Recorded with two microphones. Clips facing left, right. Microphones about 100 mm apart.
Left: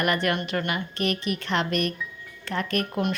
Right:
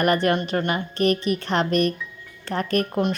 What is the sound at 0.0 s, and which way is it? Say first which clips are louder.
Speech: right 5 dB; 35° right (ahead or behind).